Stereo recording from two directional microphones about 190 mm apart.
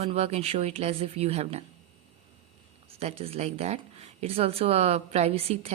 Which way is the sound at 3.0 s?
30° right (ahead or behind).